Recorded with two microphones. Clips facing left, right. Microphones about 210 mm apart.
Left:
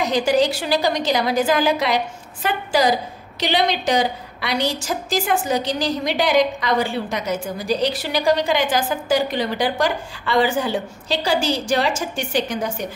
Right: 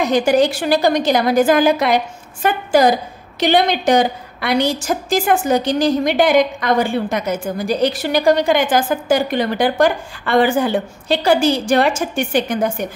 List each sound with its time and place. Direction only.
0.0 s a woman's voice: 50° right (ahead or behind)